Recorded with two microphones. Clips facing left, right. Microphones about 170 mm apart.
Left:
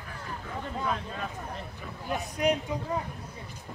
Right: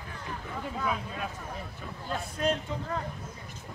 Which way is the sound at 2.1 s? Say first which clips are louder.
Left 2 dB; 15° left (ahead or behind).